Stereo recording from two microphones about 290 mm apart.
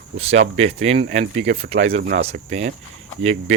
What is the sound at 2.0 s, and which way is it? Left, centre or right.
Speech, right.